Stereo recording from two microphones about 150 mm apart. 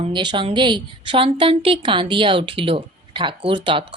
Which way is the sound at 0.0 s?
30° right (ahead or behind).